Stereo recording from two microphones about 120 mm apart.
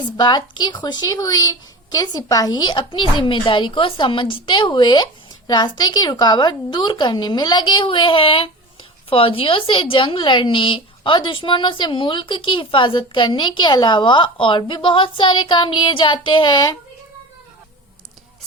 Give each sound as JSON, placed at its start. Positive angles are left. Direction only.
{"t": 0.0, "sound": "a woman's voice", "side_deg": 40}